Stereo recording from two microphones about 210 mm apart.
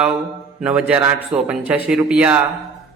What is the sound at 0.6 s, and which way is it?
A man's voice, 5° right (ahead or behind).